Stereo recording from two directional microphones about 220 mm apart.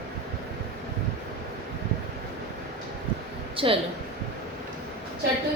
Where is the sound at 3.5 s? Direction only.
25° right (ahead or behind).